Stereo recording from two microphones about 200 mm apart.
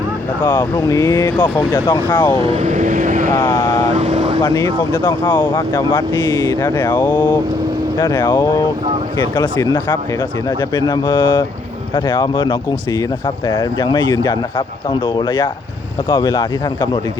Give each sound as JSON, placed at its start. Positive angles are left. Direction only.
{"t": 0.4, "sound": "speech", "side_deg": 15}
{"t": 2.4, "sound": "speech", "side_deg": -35}
{"t": 3.3, "sound": "speech", "side_deg": 10}
{"t": 3.9, "sound": "vehicle", "side_deg": -35}
{"t": 4.4, "sound": "speech", "side_deg": 10}